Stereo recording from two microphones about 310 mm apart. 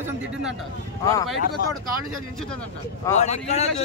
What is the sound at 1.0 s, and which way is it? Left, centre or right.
Speech, centre.